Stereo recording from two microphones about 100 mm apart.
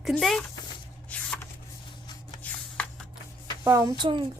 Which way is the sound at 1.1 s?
15° left (ahead or behind).